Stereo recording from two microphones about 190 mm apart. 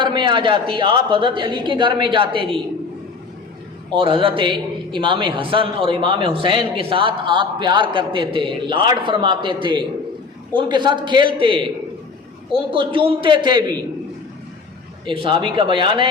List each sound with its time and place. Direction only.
0.0 s a man's voice: 25° right (ahead or behind)
3.8 s a man's voice: 25° right (ahead or behind)
12.7 s a man's voice: 25° right (ahead or behind)
15.0 s a man's voice: 25° right (ahead or behind)